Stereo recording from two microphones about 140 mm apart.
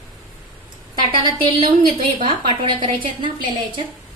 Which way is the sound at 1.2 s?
35° right (ahead or behind).